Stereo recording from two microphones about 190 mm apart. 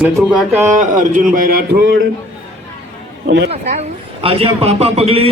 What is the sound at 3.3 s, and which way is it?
Speech, 65° right (ahead or behind).